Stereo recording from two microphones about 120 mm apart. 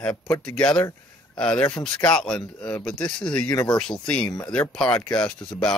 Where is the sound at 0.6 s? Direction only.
10° left (ahead or behind).